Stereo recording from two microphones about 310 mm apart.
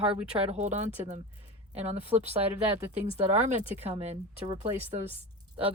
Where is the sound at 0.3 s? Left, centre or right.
Centre.